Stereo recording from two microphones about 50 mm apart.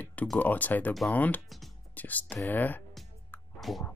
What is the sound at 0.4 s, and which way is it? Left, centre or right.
Speech, left.